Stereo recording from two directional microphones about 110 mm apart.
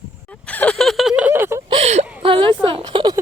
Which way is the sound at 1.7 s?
70° right (ahead or behind).